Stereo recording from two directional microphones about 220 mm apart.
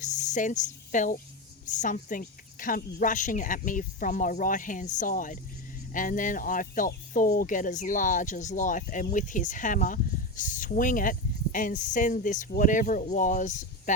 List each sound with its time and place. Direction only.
0.0 s speech: 35° left (ahead or behind)